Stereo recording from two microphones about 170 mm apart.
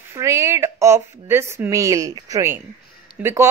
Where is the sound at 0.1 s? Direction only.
15° right (ahead or behind).